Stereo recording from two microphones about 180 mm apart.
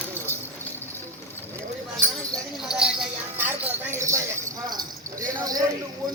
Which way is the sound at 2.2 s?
Centre (ahead or behind).